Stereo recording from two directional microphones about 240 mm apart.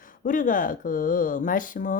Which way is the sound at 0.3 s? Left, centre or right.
Left.